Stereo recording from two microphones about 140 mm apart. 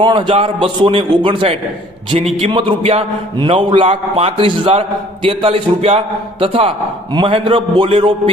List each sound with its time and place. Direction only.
0.0 s a man's voice: 35° right (ahead or behind)